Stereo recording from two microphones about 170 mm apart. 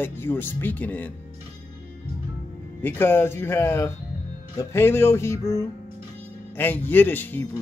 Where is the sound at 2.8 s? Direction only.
10° left (ahead or behind).